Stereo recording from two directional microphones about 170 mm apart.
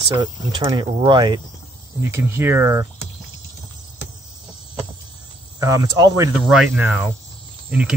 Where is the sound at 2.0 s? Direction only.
15° right (ahead or behind).